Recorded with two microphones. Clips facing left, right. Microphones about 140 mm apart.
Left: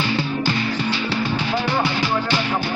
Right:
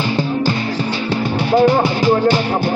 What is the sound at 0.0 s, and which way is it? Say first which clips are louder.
Music: right 4 dB; 40° right (ahead or behind).